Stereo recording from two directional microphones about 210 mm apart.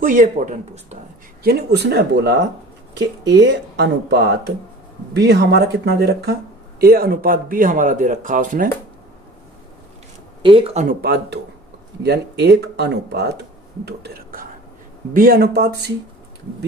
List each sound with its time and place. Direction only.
0.0 s speech: 40° right (ahead or behind)
1.4 s speech: 50° right (ahead or behind)
10.4 s speech: 25° right (ahead or behind)
11.0 s speech: 50° right (ahead or behind)